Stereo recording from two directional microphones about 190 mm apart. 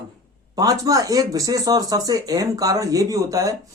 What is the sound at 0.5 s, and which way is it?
Speech, 20° right (ahead or behind).